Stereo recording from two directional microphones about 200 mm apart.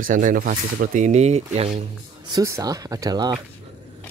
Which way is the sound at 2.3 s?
15° right (ahead or behind).